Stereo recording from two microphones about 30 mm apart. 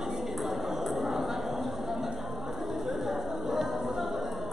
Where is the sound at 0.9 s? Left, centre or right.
Centre.